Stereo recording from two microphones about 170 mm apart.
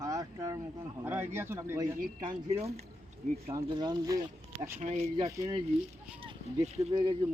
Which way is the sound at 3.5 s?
20° right (ahead or behind).